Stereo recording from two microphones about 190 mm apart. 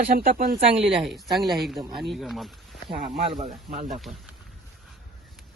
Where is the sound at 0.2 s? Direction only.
50° right (ahead or behind).